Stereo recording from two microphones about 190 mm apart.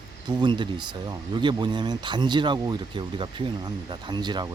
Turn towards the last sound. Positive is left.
turn(degrees=-25)  # may be behind; listen again after turning